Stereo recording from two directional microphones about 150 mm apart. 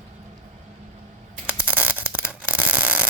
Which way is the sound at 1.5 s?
10° right (ahead or behind).